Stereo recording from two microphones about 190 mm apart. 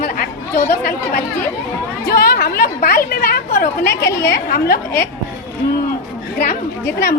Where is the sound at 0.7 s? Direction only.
45° left (ahead or behind).